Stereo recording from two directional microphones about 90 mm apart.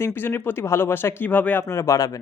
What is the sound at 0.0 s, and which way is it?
A man's voice, 25° left (ahead or behind).